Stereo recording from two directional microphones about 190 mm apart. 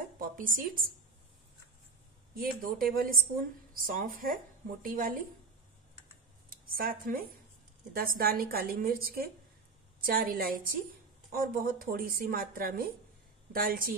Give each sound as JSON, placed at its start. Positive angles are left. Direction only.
{"t": 0.2, "sound": "a woman's voice", "side_deg": -45}
{"t": 2.3, "sound": "a woman's voice", "side_deg": -50}
{"t": 6.5, "sound": "a woman's voice", "side_deg": -50}